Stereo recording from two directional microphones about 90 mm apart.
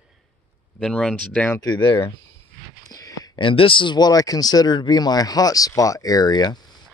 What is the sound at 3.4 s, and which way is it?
Speech, 75° left (ahead or behind).